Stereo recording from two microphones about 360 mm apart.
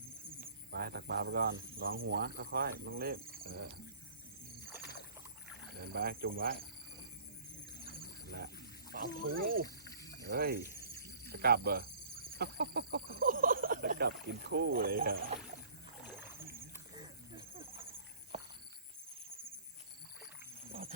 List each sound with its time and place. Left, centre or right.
0.3 s speech: right
5.8 s speech: right
7.9 s wild animals: right
8.9 s speech: right
10.3 s cricket: right
12.4 s speech: right
16.9 s a sound: centre